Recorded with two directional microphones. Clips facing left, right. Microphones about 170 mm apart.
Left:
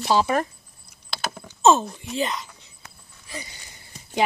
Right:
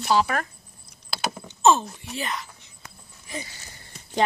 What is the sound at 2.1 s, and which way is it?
Speech, 20° left (ahead or behind).